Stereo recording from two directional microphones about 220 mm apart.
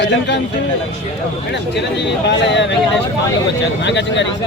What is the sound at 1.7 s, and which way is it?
Speech, 50° left (ahead or behind).